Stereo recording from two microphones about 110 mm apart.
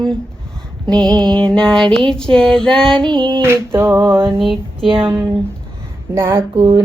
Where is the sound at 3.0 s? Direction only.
45° right (ahead or behind).